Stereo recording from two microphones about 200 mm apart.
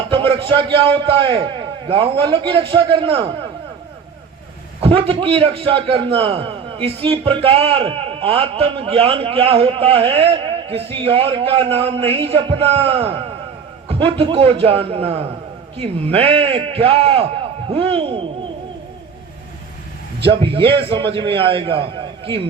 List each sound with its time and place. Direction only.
0.1 s a man's voice: 25° right (ahead or behind)
4.8 s a man's voice: 30° right (ahead or behind)
20.2 s a man's voice: 25° right (ahead or behind)